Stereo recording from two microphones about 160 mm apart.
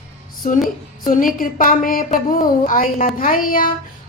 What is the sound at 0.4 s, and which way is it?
A woman's voice, 55° left (ahead or behind).